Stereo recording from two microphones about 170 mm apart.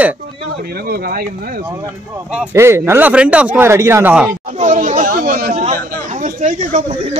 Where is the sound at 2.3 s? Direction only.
5° right (ahead or behind).